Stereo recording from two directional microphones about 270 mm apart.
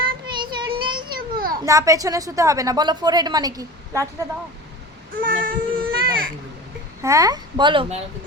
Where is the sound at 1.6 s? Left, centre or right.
Centre.